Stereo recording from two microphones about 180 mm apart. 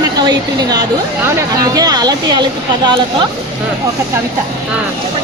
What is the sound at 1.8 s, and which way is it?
Speech, 20° right (ahead or behind).